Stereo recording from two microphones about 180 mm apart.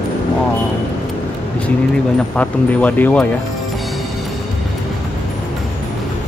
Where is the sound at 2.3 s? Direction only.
10° left (ahead or behind).